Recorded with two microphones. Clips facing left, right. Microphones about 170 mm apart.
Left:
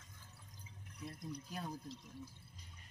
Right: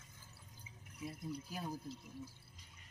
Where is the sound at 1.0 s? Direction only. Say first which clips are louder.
Right 3 dB; 5° right (ahead or behind).